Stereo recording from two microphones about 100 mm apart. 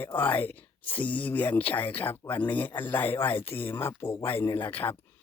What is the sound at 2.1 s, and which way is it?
Speech, 25° left (ahead or behind).